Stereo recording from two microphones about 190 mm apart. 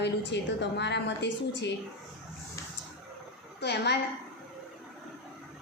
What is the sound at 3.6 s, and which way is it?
Speech, 60° left (ahead or behind).